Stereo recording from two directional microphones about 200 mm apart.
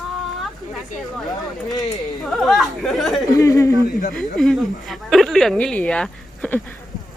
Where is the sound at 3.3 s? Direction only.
15° left (ahead or behind).